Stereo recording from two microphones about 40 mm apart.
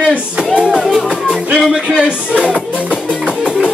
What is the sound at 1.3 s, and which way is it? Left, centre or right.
Speech, centre.